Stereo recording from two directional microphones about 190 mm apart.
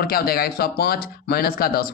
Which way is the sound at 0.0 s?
55° left (ahead or behind).